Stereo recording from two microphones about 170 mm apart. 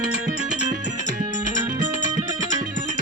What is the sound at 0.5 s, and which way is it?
Music, 45° right (ahead or behind).